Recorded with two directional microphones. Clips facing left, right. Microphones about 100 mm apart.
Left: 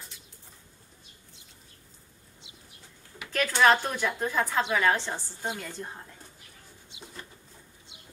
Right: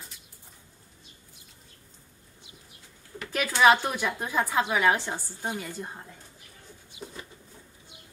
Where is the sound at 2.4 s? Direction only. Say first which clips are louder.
Right 2 dB; 20° left (ahead or behind).